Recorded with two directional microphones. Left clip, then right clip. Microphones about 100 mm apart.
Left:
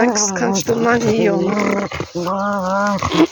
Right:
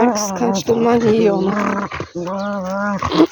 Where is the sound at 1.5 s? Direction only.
25° left (ahead or behind).